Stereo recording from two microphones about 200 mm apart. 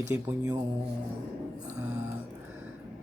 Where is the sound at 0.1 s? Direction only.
10° right (ahead or behind).